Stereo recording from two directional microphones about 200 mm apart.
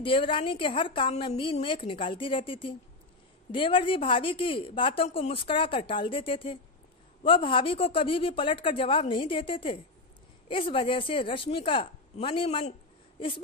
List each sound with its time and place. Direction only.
0.0 s a woman's voice: 25° left (ahead or behind)